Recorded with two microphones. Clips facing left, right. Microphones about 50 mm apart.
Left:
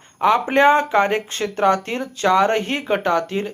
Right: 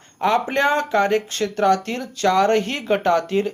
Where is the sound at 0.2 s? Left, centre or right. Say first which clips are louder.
Left 3 dB; centre.